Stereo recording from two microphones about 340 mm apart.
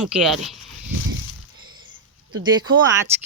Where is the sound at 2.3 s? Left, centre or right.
Right.